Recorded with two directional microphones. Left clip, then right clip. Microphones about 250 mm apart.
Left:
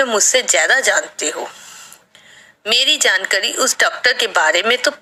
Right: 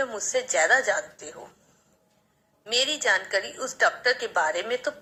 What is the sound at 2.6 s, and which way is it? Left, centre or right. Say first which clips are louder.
A woman's voice: left 11 dB; left.